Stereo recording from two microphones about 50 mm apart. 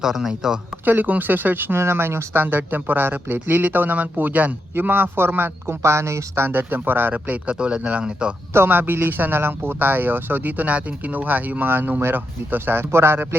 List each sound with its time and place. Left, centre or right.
0.0 s speech: centre
0.9 s a man's voice: right
1.8 s a man's voice: right
4.7 s speech: right
5.8 s a man's voice: right
8.5 s a man's voice: right